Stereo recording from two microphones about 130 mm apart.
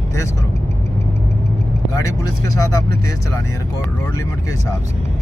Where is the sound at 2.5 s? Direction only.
25° left (ahead or behind).